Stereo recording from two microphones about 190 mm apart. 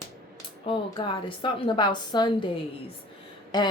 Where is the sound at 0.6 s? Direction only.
25° left (ahead or behind).